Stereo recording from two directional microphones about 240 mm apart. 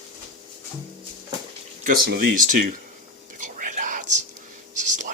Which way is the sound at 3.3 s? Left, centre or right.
Right.